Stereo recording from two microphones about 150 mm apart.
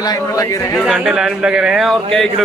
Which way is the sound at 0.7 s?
Centre (ahead or behind).